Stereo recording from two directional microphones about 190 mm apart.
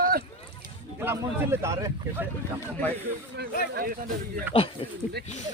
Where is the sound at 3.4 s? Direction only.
60° right (ahead or behind).